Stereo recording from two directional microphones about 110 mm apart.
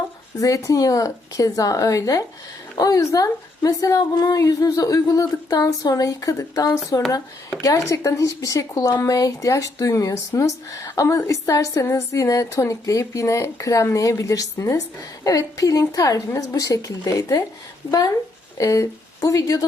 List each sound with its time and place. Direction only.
0.3 s speech: 30° left (ahead or behind)
18.5 s speech: 30° left (ahead or behind)